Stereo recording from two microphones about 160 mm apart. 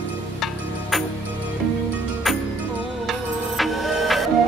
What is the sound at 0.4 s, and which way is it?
Music, centre (ahead or behind).